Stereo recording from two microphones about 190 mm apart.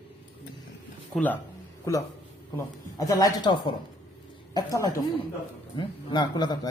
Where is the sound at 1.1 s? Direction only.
10° left (ahead or behind).